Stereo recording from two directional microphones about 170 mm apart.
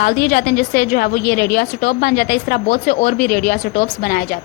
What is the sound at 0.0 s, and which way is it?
A woman's voice, 65° left (ahead or behind).